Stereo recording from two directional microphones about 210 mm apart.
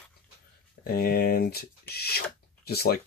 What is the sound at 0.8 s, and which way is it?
Speech, 45° left (ahead or behind).